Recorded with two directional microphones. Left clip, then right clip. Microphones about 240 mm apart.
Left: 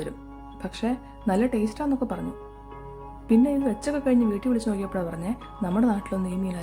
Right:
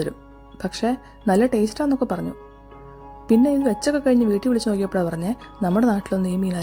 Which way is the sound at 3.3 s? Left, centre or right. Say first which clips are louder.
Right 4 dB; right.